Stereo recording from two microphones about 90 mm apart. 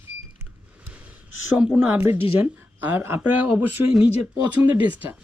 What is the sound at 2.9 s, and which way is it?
Speech, 20° right (ahead or behind).